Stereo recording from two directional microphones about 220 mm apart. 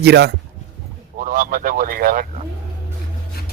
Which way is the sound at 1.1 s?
40° right (ahead or behind).